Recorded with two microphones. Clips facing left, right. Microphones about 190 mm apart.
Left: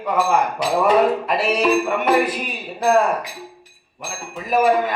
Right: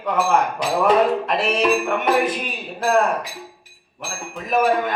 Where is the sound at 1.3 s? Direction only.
5° left (ahead or behind).